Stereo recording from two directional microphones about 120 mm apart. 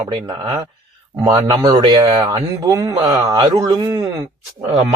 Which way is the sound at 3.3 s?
30° right (ahead or behind).